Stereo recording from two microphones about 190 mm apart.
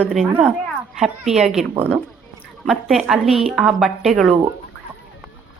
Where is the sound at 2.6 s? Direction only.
Centre (ahead or behind).